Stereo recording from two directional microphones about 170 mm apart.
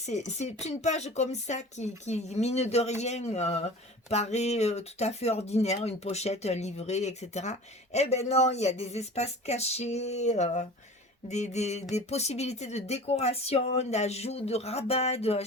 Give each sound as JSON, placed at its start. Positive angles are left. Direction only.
{"t": 0.0, "sound": "speech", "side_deg": 40}